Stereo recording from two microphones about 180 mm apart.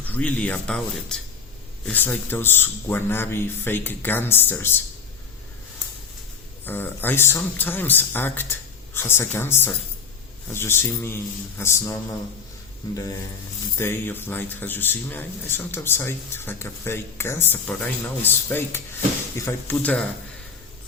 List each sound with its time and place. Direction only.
0.0 s speech: 10° left (ahead or behind)
6.7 s speech: 10° left (ahead or behind)
13.0 s speech: 20° left (ahead or behind)